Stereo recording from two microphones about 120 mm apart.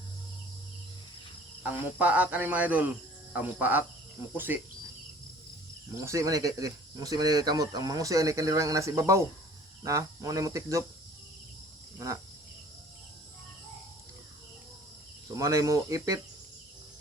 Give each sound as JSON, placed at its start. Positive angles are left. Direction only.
{"t": 1.6, "sound": "speech", "side_deg": -10}
{"t": 6.1, "sound": "speech", "side_deg": -25}
{"t": 11.9, "sound": "cricket", "side_deg": -25}
{"t": 15.3, "sound": "speech", "side_deg": -25}